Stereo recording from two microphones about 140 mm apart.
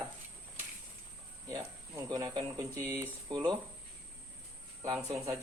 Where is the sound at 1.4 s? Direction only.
25° right (ahead or behind).